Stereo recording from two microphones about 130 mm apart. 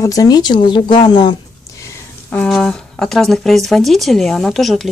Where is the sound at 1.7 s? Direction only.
20° left (ahead or behind).